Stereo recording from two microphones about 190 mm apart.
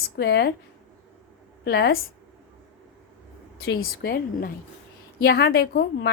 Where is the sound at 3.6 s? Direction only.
55° left (ahead or behind).